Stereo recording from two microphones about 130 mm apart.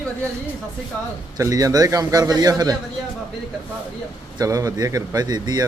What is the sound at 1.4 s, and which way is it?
A man's voice, 25° right (ahead or behind).